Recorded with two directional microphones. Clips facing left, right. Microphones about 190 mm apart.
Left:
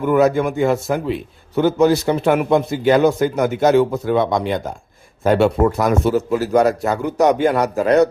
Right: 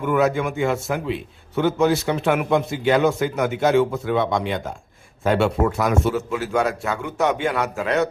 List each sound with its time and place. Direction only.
0.0 s a man's voice: 35° left (ahead or behind)